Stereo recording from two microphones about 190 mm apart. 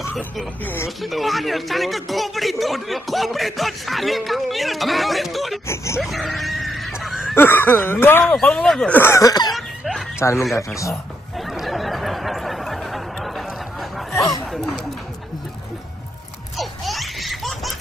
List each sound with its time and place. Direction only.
0.1 s speech: centre (ahead or behind)
5.9 s a sound: centre (ahead or behind)
7.3 s speech: 10° left (ahead or behind)
9.5 s laughter: centre (ahead or behind)
10.1 s speech: 15° left (ahead or behind)
11.3 s a sound: centre (ahead or behind)
16.5 s laughter: centre (ahead or behind)